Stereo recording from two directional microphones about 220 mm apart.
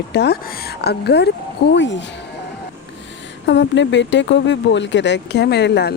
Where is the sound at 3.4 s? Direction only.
55° left (ahead or behind).